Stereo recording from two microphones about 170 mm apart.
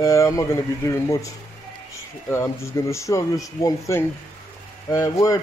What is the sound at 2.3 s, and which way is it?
Speech, 15° left (ahead or behind).